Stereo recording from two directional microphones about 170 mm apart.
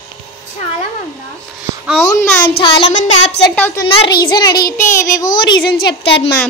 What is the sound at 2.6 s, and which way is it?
Child singing, 30° left (ahead or behind).